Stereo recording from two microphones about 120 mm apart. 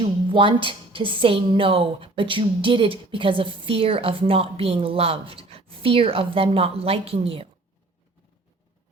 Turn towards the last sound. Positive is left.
turn(degrees=-50)  # may be behind; listen again after turning